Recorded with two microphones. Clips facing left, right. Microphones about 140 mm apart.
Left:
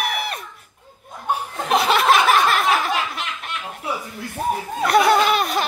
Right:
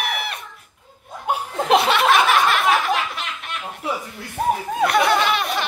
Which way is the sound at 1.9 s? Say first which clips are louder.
Left 1 dB; 40° left (ahead or behind).